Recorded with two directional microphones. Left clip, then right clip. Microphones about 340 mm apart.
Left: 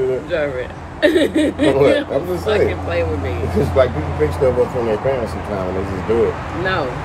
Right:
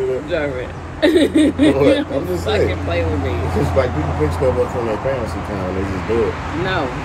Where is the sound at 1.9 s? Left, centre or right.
Centre.